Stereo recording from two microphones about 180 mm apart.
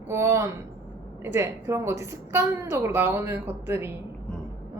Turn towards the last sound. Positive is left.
turn(degrees=-10)  # may be behind; listen again after turning